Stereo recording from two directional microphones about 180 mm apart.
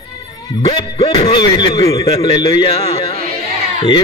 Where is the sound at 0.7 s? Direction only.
30° left (ahead or behind).